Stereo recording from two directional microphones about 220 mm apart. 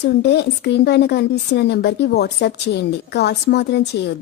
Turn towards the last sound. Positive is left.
turn(degrees=50)  # may be behind; listen again after turning